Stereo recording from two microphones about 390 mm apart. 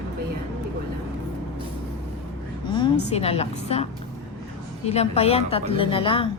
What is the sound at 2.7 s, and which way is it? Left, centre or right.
A woman's voice, centre.